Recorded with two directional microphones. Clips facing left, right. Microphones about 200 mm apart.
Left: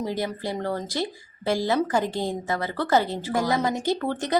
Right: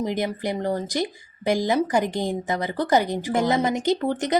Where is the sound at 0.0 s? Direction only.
20° right (ahead or behind).